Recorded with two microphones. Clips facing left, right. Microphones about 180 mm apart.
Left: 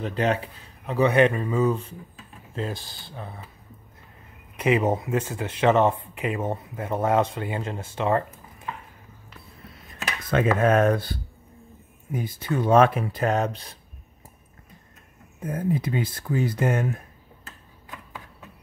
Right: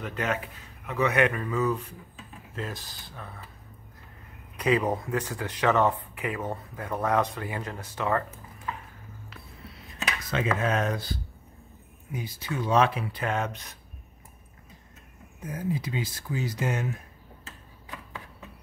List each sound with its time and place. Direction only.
0.0 s speech: 30° left (ahead or behind)
4.6 s speech: 25° left (ahead or behind)
10.3 s speech: 55° left (ahead or behind); by 13.7 s 30° left (ahead or behind)
15.4 s speech: 55° left (ahead or behind)